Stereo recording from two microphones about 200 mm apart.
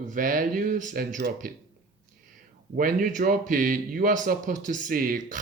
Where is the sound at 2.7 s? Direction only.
45° right (ahead or behind).